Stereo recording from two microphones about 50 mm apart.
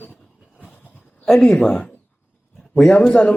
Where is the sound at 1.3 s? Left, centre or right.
Centre.